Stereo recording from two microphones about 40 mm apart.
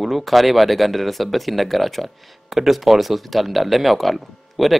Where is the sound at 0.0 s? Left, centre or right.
Centre.